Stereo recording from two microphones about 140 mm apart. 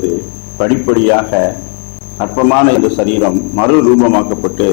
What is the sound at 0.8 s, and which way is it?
A man's voice, 15° left (ahead or behind).